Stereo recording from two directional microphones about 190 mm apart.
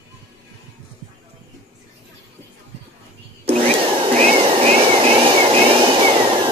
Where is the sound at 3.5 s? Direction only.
30° right (ahead or behind).